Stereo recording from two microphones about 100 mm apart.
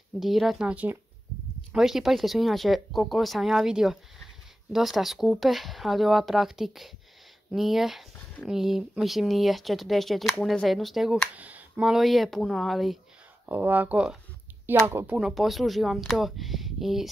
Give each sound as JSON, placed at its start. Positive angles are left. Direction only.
{"t": 0.2, "sound": "speech", "side_deg": 0}
{"t": 11.3, "sound": "speech", "side_deg": -15}
{"t": 11.9, "sound": "speech", "side_deg": 0}
{"t": 13.5, "sound": "speech", "side_deg": -20}
{"t": 15.1, "sound": "speech", "side_deg": -5}